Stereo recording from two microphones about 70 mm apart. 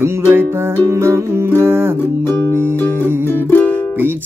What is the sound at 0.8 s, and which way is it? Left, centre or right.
Music, right.